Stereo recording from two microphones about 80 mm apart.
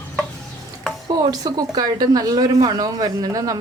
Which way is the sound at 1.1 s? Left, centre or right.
Right.